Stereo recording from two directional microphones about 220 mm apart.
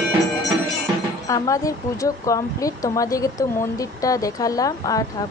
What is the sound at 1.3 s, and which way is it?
Speech, 15° left (ahead or behind).